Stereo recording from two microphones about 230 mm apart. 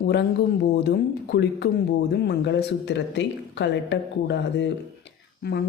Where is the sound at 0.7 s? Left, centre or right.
Left.